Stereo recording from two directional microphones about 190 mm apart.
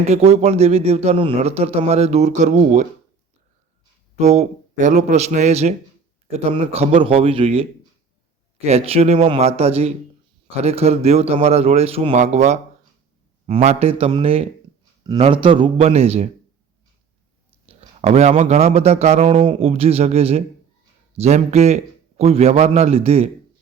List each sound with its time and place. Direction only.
0.1 s a man's voice: 35° right (ahead or behind)
4.2 s a man's voice: 35° right (ahead or behind)
17.7 s a man's voice: 35° right (ahead or behind)